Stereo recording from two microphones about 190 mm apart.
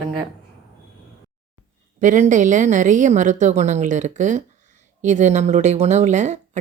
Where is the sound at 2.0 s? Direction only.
40° right (ahead or behind).